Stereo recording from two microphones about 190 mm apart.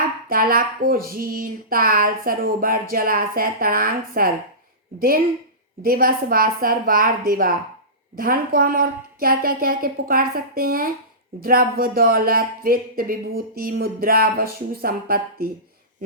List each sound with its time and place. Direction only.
0.3 s speech: 50° right (ahead or behind)